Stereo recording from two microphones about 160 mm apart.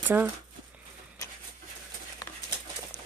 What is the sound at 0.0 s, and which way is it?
Speech, 10° right (ahead or behind).